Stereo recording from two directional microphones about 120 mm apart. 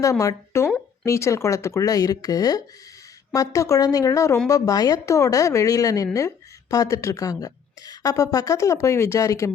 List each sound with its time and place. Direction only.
0.0 s a woman's voice: 25° left (ahead or behind)